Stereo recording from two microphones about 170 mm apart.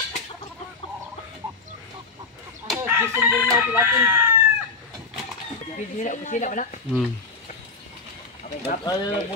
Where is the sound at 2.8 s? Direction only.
10° right (ahead or behind).